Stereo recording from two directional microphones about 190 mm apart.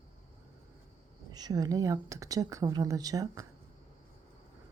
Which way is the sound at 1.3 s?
20° right (ahead or behind).